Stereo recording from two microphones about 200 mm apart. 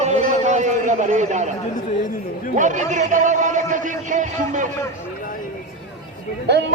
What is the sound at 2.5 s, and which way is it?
A man's voice, 40° right (ahead or behind).